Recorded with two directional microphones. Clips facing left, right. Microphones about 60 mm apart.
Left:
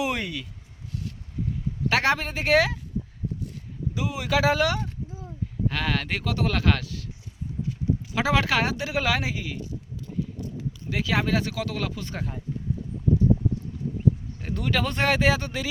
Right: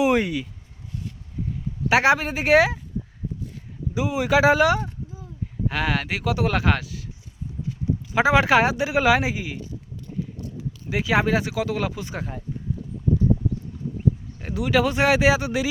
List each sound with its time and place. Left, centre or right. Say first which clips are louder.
0.0 s a sound: right 8 dB; centre
1.9 s speech: right 5 dB; centre
3.9 s speech: right 6 dB; right
8.1 s speech: right 7 dB; right
10.8 s speech: right 5 dB; centre
14.4 s speech: right 6 dB; centre